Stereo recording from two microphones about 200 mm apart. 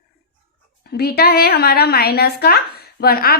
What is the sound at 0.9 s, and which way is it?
A woman's voice, 50° left (ahead or behind).